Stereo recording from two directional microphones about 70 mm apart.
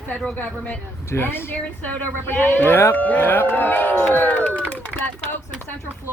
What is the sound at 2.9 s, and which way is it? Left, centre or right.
Speech, left.